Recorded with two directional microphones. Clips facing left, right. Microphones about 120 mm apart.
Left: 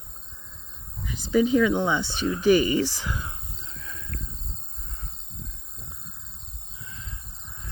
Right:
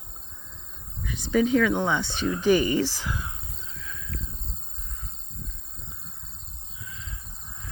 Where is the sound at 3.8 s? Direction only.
35° left (ahead or behind).